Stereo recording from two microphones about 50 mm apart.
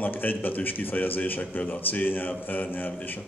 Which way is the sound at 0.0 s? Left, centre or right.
Left.